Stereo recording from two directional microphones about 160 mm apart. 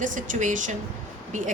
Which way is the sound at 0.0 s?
55° right (ahead or behind).